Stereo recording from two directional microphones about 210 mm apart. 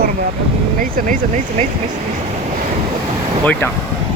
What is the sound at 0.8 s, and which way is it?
Speech, 40° right (ahead or behind).